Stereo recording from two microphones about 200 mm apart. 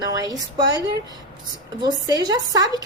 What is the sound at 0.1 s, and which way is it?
Speech, 20° right (ahead or behind).